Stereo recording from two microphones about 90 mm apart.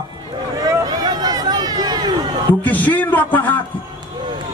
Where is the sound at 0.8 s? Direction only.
50° right (ahead or behind).